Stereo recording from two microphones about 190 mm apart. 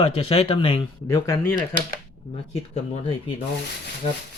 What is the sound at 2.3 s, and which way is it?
Speech, 30° left (ahead or behind).